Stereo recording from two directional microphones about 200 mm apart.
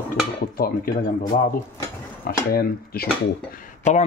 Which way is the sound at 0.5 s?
45° left (ahead or behind).